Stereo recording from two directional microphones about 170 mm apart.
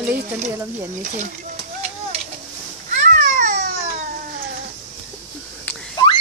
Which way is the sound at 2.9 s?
45° right (ahead or behind).